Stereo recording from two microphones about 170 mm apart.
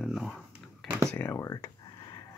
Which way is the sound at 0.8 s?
15° right (ahead or behind).